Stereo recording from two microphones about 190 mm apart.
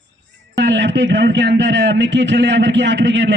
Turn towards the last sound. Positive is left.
turn(degrees=-70)  # may be behind; listen again after turning